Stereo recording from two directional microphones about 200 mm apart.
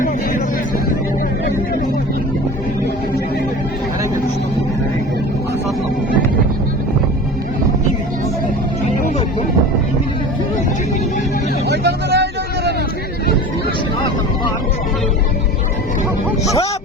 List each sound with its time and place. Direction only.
11.7 s vehicle: 55° right (ahead or behind)
16.4 s music: 15° left (ahead or behind)